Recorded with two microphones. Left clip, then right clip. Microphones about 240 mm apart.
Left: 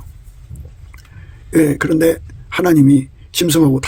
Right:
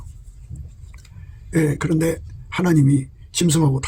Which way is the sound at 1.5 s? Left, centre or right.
Left.